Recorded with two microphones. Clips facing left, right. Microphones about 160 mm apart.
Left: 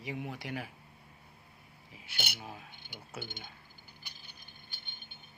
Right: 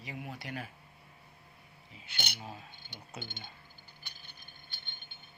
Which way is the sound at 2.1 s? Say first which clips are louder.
Even; 10° left (ahead or behind).